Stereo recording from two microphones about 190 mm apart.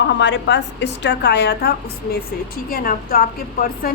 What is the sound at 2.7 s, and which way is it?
A woman's voice, 50° left (ahead or behind).